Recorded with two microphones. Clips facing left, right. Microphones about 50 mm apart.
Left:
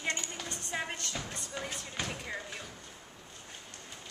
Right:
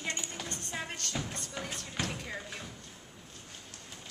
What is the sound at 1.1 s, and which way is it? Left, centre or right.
Music, centre.